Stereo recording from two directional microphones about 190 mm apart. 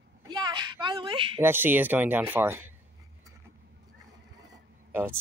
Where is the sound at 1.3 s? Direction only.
10° right (ahead or behind).